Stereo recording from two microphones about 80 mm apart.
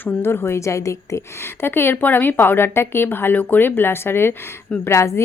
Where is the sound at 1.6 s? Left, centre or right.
Left.